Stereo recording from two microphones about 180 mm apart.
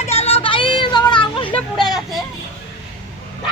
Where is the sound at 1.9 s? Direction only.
Centre (ahead or behind).